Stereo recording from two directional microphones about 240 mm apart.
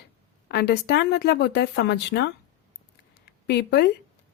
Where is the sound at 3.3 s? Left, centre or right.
Left.